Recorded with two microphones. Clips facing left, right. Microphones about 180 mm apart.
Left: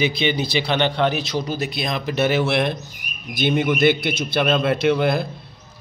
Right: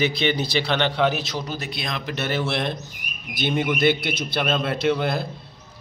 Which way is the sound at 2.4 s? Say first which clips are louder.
Left 5 dB; 60° left (ahead or behind).